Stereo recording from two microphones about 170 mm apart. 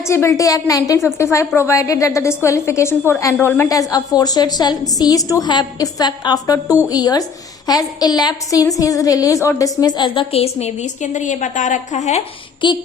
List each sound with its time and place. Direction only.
0.1 s a woman's voice: 15° left (ahead or behind); by 12.2 s 45° left (ahead or behind)
12.6 s a woman's voice: 30° left (ahead or behind)